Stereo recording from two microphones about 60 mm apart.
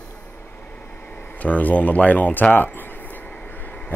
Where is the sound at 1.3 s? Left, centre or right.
Left.